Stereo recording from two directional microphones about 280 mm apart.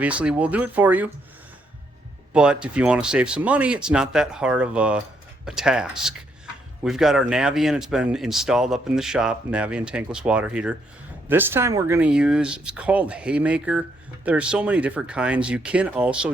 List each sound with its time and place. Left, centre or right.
0.0 s speech: centre
2.3 s speech: centre